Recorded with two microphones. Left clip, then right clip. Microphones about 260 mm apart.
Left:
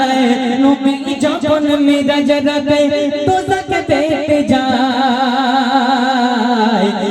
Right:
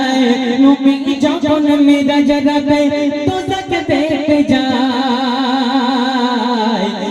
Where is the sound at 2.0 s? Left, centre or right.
Left.